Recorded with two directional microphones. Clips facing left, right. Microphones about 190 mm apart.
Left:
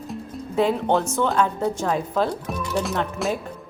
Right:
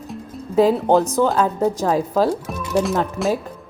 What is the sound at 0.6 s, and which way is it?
A woman's voice, 35° right (ahead or behind).